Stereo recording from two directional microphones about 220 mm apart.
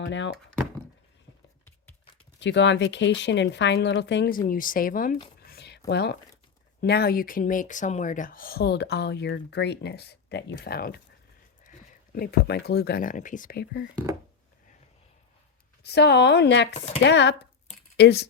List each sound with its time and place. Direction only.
0.0 s speech: 55° left (ahead or behind)
2.4 s speech: 55° left (ahead or behind)
5.5 s a sound: 50° left (ahead or behind)
5.9 s speech: 50° left (ahead or behind)
15.8 s speech: 50° left (ahead or behind)